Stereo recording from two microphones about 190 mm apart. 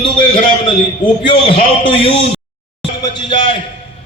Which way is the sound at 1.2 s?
25° left (ahead or behind).